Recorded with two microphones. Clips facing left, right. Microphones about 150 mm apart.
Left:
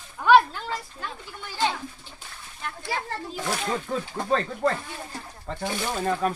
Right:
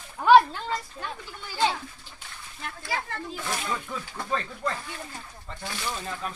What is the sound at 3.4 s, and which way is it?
Speech, 40° left (ahead or behind).